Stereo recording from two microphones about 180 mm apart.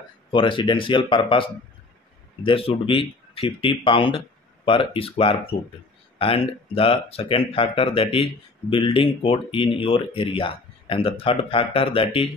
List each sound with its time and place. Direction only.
0.3 s speech: 30° left (ahead or behind)